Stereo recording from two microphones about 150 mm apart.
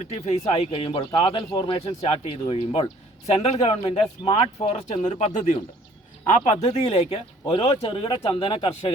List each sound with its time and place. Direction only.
0.1 s speech: 45° left (ahead or behind)
4.2 s speech: 30° left (ahead or behind)
4.6 s speech: 50° left (ahead or behind)